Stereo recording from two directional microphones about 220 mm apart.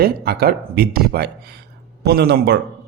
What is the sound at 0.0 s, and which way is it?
Speech, 45° right (ahead or behind).